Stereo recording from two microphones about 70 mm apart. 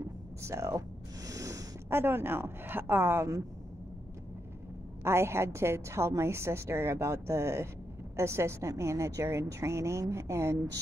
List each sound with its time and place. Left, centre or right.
0.0 s a sound: right
1.9 s a woman's voice: right
5.0 s a woman's voice: right